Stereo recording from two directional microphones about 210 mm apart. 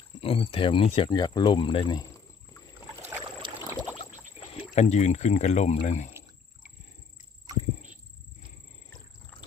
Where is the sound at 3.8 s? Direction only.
25° left (ahead or behind).